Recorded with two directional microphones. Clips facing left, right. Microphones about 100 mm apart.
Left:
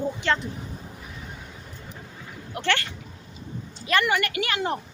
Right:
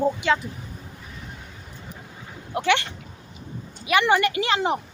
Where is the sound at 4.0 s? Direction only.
25° right (ahead or behind).